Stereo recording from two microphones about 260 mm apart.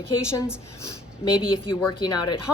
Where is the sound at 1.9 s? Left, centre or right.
Centre.